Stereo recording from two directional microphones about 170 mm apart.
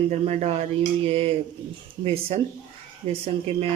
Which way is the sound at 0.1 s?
40° right (ahead or behind).